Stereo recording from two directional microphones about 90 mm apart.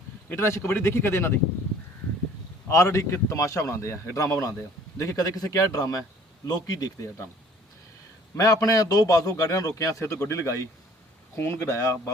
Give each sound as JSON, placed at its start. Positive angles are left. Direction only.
{"t": 0.3, "sound": "speech", "side_deg": 30}
{"t": 2.6, "sound": "a man's voice", "side_deg": 35}
{"t": 8.4, "sound": "a man's voice", "side_deg": 40}